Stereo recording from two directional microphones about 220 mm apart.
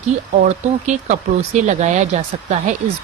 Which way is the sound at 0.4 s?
35° right (ahead or behind).